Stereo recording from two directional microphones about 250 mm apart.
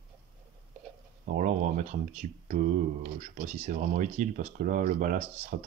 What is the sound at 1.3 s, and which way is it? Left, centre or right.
Speech, right.